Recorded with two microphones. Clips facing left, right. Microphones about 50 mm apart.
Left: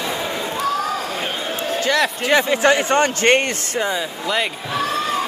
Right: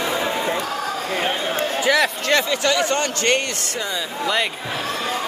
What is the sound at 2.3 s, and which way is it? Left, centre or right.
A man's voice, left.